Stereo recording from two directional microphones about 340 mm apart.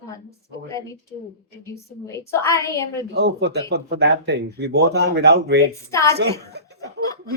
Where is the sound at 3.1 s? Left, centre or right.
Right.